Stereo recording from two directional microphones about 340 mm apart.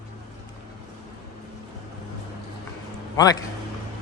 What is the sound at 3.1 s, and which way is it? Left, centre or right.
Speech, centre.